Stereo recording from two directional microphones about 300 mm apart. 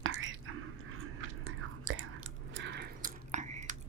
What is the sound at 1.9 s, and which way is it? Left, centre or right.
Chewing, right.